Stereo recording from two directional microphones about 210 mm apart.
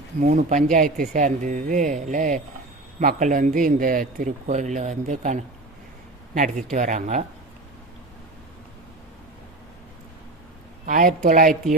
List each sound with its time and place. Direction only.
0.2 s speech: 40° right (ahead or behind)
10.8 s speech: 40° right (ahead or behind)